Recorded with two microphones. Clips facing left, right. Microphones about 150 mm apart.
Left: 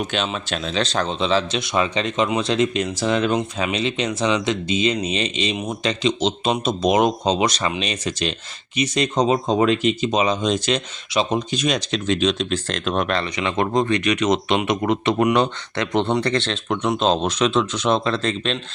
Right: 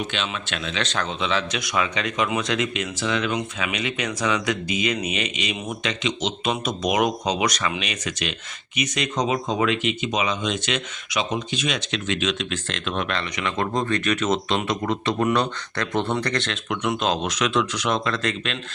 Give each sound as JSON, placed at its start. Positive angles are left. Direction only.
{"t": 0.1, "sound": "speech", "side_deg": 40}
{"t": 13.3, "sound": "speech", "side_deg": 25}